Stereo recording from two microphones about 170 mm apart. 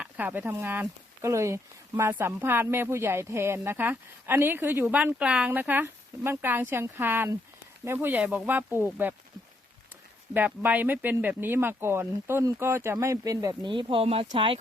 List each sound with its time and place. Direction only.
0.0 s speech: 10° right (ahead or behind)
10.3 s speech: 10° right (ahead or behind); by 14.6 s 30° right (ahead or behind)